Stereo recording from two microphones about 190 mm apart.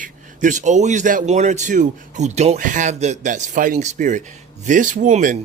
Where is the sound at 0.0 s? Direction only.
45° right (ahead or behind).